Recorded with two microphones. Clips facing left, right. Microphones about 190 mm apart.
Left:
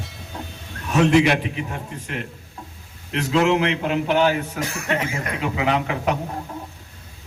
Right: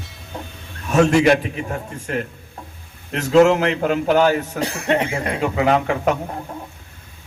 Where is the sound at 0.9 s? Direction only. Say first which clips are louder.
Right 2 dB; 45° right (ahead or behind).